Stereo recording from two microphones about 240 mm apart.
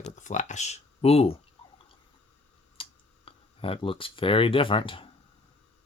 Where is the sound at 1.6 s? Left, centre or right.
Left.